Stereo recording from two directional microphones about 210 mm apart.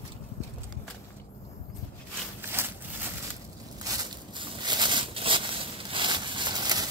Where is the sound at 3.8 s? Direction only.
15° right (ahead or behind).